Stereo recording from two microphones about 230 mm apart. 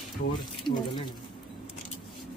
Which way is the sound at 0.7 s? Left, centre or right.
Centre.